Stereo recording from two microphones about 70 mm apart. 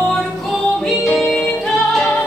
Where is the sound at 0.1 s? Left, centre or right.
Centre.